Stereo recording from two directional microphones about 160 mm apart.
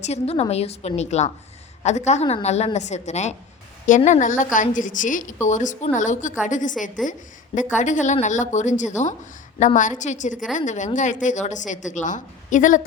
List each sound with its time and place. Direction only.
0.0 s a woman's voice: 40° left (ahead or behind)